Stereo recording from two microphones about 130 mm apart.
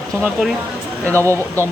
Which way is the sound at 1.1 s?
20° right (ahead or behind).